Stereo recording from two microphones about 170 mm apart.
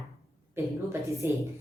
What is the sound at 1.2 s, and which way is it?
Speech, 15° right (ahead or behind).